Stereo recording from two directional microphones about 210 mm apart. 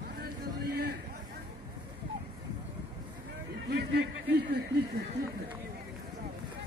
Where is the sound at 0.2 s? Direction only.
45° right (ahead or behind).